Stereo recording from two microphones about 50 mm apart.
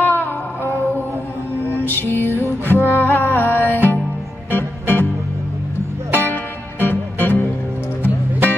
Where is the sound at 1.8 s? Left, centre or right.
Left.